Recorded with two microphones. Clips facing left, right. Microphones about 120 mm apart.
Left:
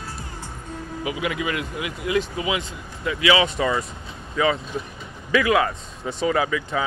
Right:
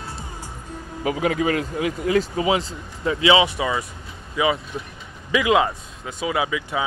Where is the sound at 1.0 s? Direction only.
40° right (ahead or behind); by 3.4 s 25° right (ahead or behind).